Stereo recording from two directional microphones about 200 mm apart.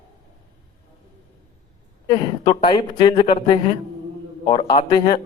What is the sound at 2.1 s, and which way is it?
A man's voice, 25° left (ahead or behind).